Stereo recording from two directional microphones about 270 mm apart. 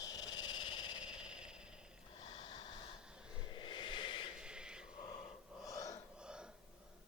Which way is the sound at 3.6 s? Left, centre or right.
Centre.